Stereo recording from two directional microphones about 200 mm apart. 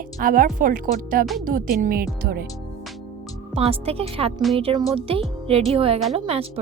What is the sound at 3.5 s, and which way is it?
A woman's voice, 30° right (ahead or behind).